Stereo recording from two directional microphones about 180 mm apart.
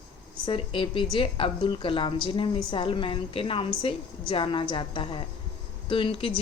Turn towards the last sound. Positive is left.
turn(degrees=30)  # may be behind; listen again after turning